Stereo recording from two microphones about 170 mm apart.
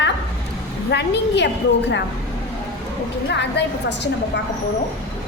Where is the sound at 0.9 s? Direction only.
85° left.